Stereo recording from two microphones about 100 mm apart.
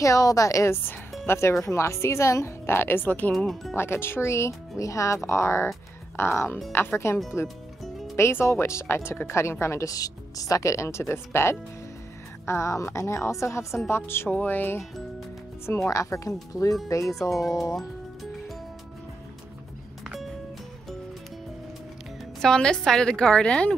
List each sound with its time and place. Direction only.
0.0 s a woman's voice: 35° left (ahead or behind); by 3.3 s 20° left (ahead or behind)
3.3 s speech: centre (ahead or behind)
3.7 s speech: 25° left (ahead or behind)
15.9 s a woman's voice: 35° left (ahead or behind)
17.1 s speech: centre (ahead or behind)
22.4 s a woman's voice: 5° left (ahead or behind)